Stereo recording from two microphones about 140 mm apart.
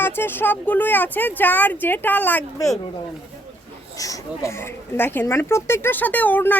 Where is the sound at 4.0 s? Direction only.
20° left (ahead or behind).